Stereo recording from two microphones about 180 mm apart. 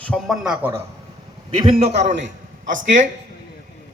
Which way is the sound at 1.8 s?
40° right (ahead or behind).